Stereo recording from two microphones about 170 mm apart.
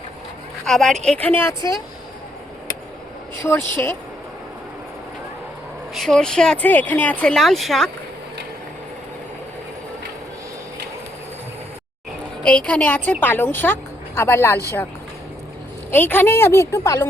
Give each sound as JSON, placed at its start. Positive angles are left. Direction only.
{"t": 0.6, "sound": "a woman's voice", "side_deg": 0}
{"t": 3.4, "sound": "a woman's voice", "side_deg": 10}
{"t": 5.9, "sound": "speech", "side_deg": 0}
{"t": 12.4, "sound": "a woman's voice", "side_deg": 5}
{"t": 15.9, "sound": "a woman's voice", "side_deg": 10}